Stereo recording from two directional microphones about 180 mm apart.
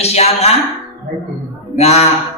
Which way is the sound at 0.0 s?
35° left (ahead or behind).